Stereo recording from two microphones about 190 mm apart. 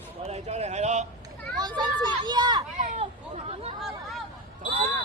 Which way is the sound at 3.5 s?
30° right (ahead or behind).